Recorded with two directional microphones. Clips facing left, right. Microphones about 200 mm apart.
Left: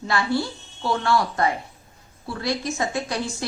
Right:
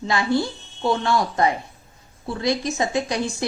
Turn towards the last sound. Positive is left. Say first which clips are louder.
# right 3 dB
turn(degrees=-15)  # may be behind; listen again after turning